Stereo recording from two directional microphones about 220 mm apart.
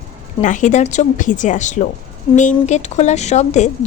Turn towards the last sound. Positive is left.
turn(degrees=30)  # may be behind; listen again after turning